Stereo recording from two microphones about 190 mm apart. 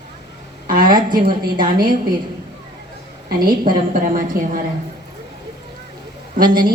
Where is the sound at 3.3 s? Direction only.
50° right (ahead or behind).